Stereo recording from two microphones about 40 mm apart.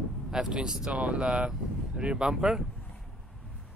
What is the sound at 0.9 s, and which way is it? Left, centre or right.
Speech, right.